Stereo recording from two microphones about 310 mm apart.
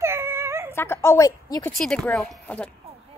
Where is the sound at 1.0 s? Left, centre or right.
Centre.